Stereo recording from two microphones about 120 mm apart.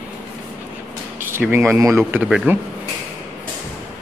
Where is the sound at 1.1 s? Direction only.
20° right (ahead or behind).